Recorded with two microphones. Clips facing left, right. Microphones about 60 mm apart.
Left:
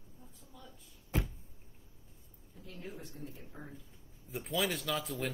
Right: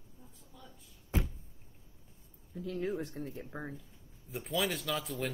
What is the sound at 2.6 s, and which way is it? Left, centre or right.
Speech, right.